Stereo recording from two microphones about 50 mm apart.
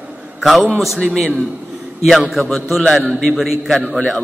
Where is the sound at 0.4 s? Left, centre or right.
Centre.